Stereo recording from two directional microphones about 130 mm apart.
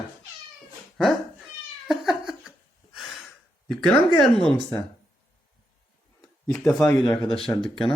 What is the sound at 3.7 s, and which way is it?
A man's voice, 5° left (ahead or behind).